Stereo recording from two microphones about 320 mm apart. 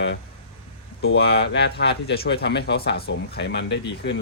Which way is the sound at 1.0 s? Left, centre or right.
Left.